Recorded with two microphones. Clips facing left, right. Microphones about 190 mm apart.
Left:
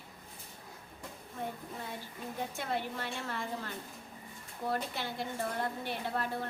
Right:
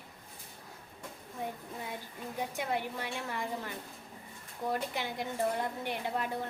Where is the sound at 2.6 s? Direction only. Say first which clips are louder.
Right 2 dB; 15° right (ahead or behind).